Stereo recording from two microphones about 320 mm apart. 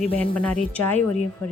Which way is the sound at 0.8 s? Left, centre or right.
Centre.